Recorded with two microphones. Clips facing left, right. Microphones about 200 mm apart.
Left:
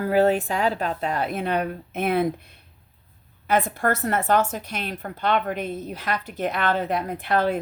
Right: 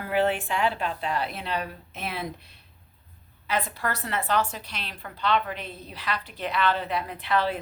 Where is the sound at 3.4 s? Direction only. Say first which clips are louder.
Left 7 dB; 50° left (ahead or behind).